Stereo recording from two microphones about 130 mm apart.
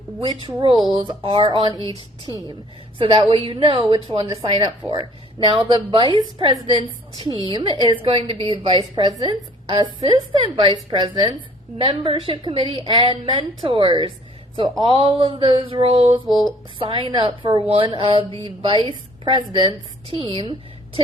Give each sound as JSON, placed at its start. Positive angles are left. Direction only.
{"t": 0.2, "sound": "a woman's voice", "side_deg": -40}
{"t": 1.6, "sound": "a woman's voice", "side_deg": -30}
{"t": 3.0, "sound": "a woman's voice", "side_deg": -45}
{"t": 9.0, "sound": "a woman's voice", "side_deg": -30}